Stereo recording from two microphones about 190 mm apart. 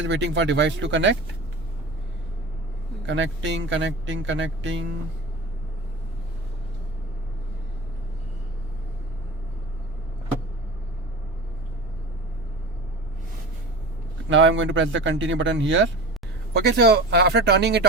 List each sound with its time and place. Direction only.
0.0 s speech: 70° right (ahead or behind)
3.1 s speech: 70° right (ahead or behind)
14.3 s speech: 80° right
16.6 s speech: 60° right (ahead or behind)